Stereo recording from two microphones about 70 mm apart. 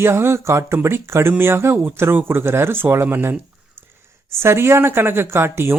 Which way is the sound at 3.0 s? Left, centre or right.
Right.